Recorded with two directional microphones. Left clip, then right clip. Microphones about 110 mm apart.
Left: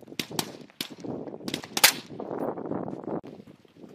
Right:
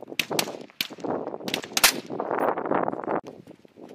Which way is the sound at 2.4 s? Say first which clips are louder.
Right 9 dB; 35° right (ahead or behind).